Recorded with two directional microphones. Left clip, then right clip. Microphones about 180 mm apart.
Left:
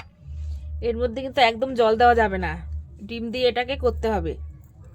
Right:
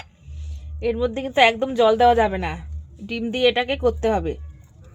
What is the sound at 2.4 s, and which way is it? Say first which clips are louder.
Speech: right 1 dB; 25° right (ahead or behind).